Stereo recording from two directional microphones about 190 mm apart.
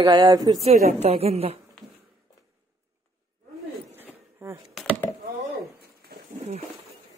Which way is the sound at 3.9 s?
10° right (ahead or behind).